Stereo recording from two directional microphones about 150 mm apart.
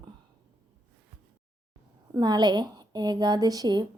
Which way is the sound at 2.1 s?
30° right (ahead or behind).